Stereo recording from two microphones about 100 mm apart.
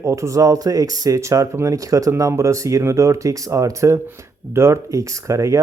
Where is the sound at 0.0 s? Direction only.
30° right (ahead or behind).